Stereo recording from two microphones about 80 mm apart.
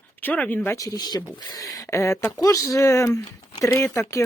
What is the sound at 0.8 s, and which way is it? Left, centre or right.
Speech, left.